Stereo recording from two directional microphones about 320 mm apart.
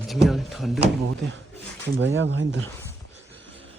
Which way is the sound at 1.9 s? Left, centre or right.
Right.